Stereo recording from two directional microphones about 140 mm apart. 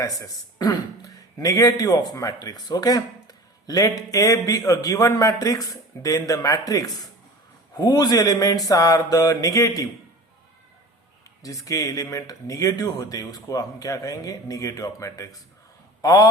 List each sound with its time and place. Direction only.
0.0 s speech: 25° left (ahead or behind)
11.4 s a man's voice: 25° left (ahead or behind)